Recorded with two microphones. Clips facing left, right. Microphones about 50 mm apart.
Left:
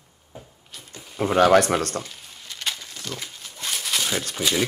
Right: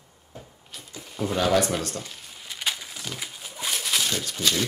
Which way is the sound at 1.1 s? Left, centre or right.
Left.